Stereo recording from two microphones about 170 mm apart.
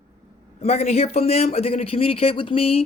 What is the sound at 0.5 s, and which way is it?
Speech, 40° left (ahead or behind).